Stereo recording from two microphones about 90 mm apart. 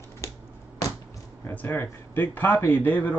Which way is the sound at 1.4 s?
20° left (ahead or behind).